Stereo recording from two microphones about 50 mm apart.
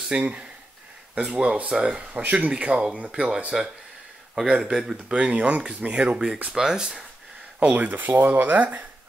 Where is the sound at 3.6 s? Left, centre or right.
Centre.